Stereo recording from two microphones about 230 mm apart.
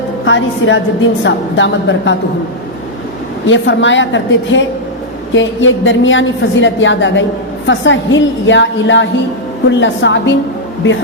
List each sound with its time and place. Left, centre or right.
0.3 s a woman's voice: left
3.4 s a woman's voice: left